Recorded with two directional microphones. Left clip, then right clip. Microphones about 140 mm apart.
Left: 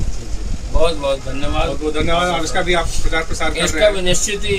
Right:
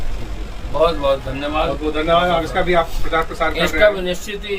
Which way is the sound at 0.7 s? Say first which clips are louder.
Right 2 dB; 15° left (ahead or behind).